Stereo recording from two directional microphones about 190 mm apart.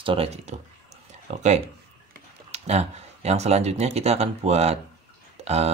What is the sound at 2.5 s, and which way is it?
Speech, 35° right (ahead or behind).